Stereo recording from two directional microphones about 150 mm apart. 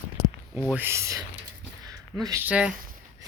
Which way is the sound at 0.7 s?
15° right (ahead or behind).